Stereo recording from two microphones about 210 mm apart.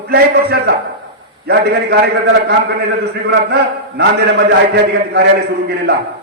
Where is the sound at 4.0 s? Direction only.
50° right (ahead or behind).